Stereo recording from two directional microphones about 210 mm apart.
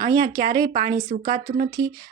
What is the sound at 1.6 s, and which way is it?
Speech, 15° right (ahead or behind).